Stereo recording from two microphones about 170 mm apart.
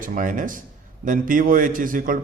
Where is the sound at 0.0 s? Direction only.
50° right (ahead or behind).